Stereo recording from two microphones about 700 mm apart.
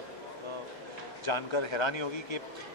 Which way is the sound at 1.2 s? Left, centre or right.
Left.